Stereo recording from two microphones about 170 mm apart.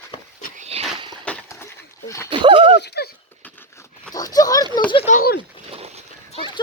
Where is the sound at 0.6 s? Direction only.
35° right (ahead or behind).